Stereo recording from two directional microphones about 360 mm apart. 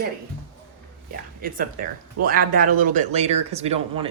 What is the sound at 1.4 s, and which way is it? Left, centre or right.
Speech, right.